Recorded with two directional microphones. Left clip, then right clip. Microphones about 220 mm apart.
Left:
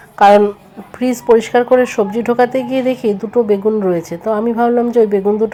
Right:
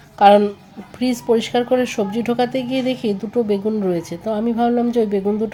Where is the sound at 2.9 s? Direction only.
5° left (ahead or behind).